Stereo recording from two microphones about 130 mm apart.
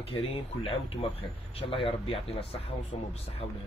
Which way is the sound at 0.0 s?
45° left (ahead or behind).